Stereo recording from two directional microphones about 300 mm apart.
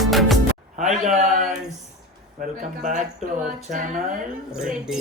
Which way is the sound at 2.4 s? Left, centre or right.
Right.